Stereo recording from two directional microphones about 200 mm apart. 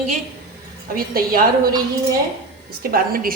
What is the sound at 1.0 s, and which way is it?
Speech, 45° right (ahead or behind).